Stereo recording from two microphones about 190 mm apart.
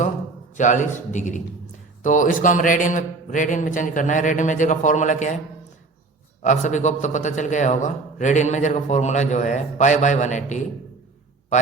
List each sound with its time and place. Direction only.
0.5 s a man's voice: 40° left (ahead or behind)
6.4 s a man's voice: 40° left (ahead or behind)